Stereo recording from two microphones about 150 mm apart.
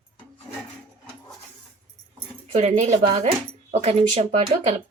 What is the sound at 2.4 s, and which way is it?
Speech, 45° right (ahead or behind).